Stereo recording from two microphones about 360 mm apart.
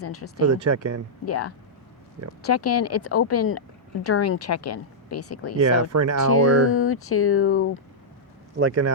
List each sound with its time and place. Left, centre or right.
0.0 s speech: left
0.4 s speech: right
1.2 s speech: left
5.5 s speech: right
6.3 s speech: left
8.5 s speech: right